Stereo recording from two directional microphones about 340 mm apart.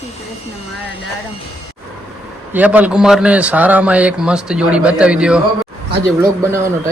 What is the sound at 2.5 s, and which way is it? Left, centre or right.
A man's voice, centre.